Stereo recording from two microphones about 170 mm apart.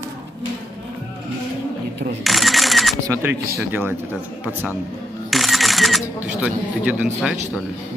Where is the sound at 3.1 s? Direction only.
10° right (ahead or behind).